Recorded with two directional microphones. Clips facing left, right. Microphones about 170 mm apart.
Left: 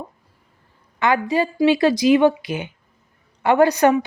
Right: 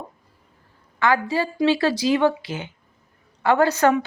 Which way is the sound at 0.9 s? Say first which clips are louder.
Left 2 dB; 20° left (ahead or behind).